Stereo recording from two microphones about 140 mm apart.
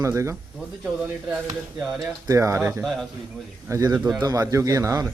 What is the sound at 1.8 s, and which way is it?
Speech, centre (ahead or behind).